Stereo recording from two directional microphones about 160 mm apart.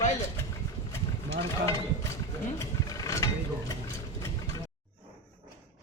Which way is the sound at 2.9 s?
20° left (ahead or behind).